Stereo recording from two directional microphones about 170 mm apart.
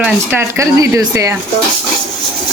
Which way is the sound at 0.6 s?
15° right (ahead or behind).